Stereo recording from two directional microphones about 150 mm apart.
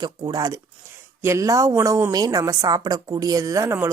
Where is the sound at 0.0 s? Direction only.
25° right (ahead or behind).